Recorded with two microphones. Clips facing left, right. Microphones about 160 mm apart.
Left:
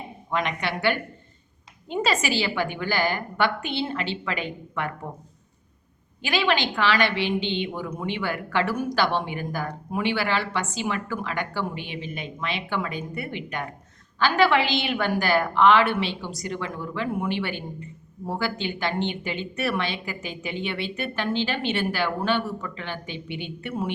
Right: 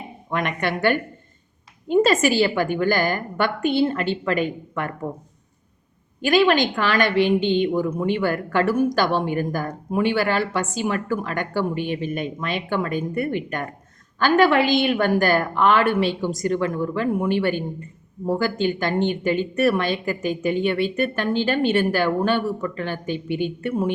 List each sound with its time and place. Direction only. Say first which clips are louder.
0.3 s a woman's voice: right 3 dB; 55° right (ahead or behind)
6.2 s a woman's voice: right 7 dB; 45° right (ahead or behind)